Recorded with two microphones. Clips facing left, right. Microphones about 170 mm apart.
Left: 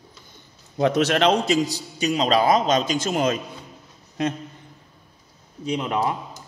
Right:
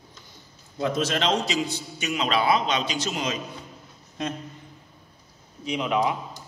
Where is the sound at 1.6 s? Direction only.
35° left (ahead or behind); by 3.4 s 50° left (ahead or behind).